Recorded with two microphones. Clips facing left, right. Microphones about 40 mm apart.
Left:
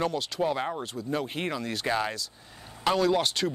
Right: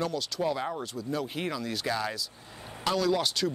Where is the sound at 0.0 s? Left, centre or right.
Left.